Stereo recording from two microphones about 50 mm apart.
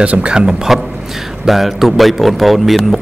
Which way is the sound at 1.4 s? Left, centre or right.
Centre.